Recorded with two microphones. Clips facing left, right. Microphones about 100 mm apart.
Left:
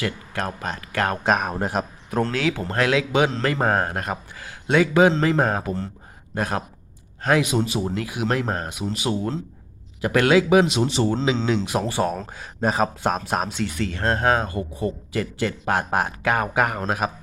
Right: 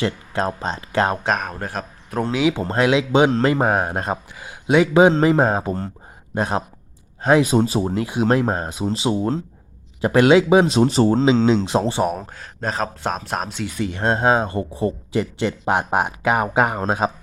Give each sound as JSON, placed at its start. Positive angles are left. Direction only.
{"t": 0.0, "sound": "speech", "side_deg": -25}
{"t": 1.2, "sound": "speech", "side_deg": 5}
{"t": 1.5, "sound": "speech", "side_deg": 20}
{"t": 2.2, "sound": "speech", "side_deg": -15}
{"t": 3.7, "sound": "speech", "side_deg": -10}
{"t": 3.9, "sound": "speech", "side_deg": -25}
{"t": 7.4, "sound": "speech", "side_deg": -35}
{"t": 10.8, "sound": "speech", "side_deg": -40}
{"t": 11.4, "sound": "speech", "side_deg": -25}
{"t": 12.4, "sound": "speech", "side_deg": 5}
{"t": 13.7, "sound": "speech", "side_deg": -15}